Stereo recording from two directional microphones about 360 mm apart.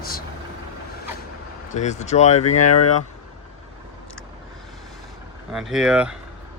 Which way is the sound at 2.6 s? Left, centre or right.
Left.